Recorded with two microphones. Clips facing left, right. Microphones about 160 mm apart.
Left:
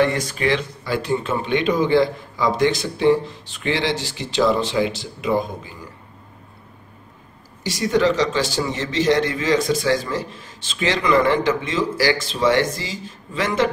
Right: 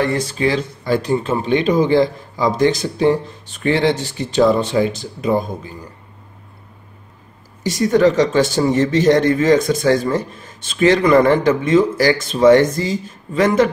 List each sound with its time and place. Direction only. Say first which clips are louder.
0.1 s speech: right 3 dB; 30° right (ahead or behind)
7.6 s a man's voice: right 5 dB; 45° right (ahead or behind)